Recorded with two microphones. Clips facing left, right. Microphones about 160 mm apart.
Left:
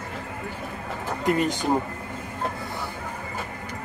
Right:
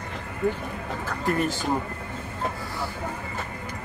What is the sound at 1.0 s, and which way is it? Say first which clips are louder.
Speech: left 3 dB; 20° left (ahead or behind).